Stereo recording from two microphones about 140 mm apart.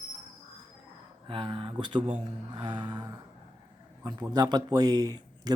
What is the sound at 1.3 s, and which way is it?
Speech, 35° right (ahead or behind).